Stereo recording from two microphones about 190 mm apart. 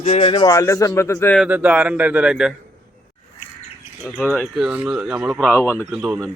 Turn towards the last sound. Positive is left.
turn(degrees=-5)  # may be behind; listen again after turning